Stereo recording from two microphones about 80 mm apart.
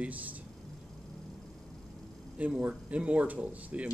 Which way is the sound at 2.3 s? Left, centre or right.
Centre.